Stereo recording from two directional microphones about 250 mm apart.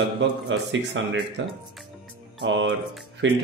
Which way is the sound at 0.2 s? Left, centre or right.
Right.